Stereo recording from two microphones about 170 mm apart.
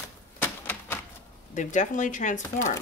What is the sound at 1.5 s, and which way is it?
Speech, 45° left (ahead or behind).